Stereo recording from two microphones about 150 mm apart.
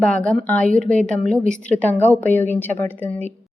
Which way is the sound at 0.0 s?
5° left (ahead or behind).